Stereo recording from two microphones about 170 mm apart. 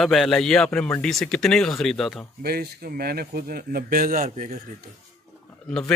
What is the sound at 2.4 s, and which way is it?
Speech, 70° right (ahead or behind).